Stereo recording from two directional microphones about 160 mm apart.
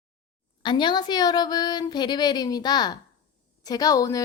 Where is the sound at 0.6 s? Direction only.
30° left (ahead or behind).